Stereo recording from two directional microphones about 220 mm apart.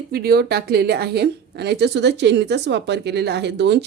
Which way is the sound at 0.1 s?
45° right (ahead or behind).